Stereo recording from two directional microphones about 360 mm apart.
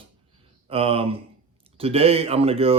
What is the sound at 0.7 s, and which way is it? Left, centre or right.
Speech, centre.